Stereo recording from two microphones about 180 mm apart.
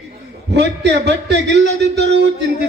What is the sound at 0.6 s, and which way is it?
Speech, 75° right (ahead or behind).